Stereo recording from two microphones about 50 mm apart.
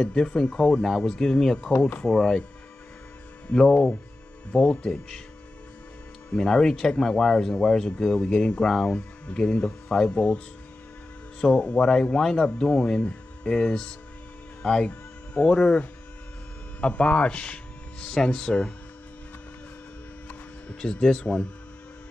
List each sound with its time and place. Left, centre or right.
0.0 s speech: centre
1.8 s speech: left
2.0 s speech: centre
3.5 s speech: left
6.3 s speech: centre
11.6 s speech: centre
16.8 s speech: left
18.0 s speech: centre
20.8 s speech: centre